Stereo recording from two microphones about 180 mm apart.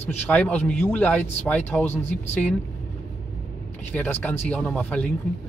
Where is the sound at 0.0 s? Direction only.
10° left (ahead or behind).